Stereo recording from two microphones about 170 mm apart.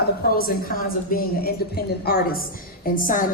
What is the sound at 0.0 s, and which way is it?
A woman's voice, 65° left (ahead or behind).